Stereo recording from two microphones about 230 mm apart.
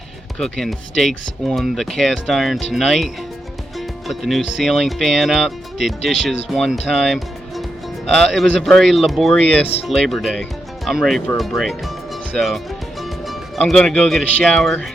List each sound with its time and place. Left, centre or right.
0.3 s speech: centre